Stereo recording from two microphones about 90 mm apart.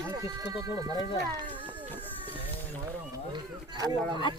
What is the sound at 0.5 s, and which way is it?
Speech, 40° right (ahead or behind).